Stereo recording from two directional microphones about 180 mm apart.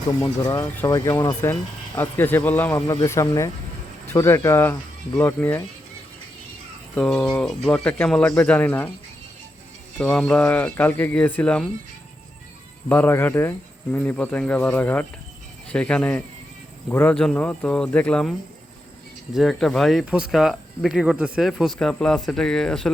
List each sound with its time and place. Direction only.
0.2 s speech: 20° left (ahead or behind)
6.9 s speech: 5° left (ahead or behind)
10.0 s speech: 5° left (ahead or behind)
12.9 s speech: 10° left (ahead or behind)